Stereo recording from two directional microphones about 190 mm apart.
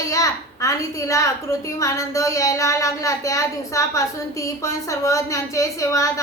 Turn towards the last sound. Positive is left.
turn(degrees=15)  # may be behind; listen again after turning